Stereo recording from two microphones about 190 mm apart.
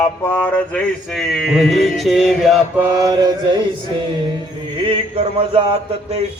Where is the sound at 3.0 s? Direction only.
20° right (ahead or behind).